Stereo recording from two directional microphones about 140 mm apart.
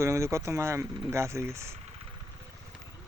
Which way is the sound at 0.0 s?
20° right (ahead or behind).